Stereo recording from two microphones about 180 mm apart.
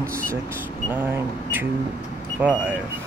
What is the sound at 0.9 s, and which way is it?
Speech, 10° right (ahead or behind).